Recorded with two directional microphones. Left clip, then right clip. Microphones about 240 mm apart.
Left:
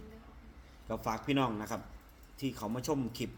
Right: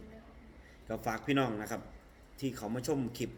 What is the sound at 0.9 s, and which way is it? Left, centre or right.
A man's voice, left.